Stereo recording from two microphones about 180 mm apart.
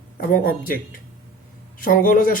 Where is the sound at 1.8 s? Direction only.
50° left (ahead or behind).